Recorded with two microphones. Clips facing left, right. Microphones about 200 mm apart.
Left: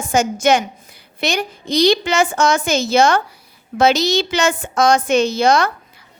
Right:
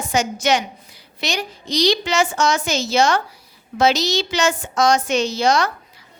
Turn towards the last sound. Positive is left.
turn(degrees=55)  # may be behind; listen again after turning